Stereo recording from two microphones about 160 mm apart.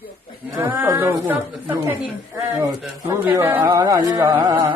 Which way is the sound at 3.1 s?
15° right (ahead or behind).